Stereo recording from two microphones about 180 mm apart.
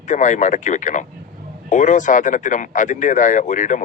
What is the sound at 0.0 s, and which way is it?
A man's voice, 40° left (ahead or behind).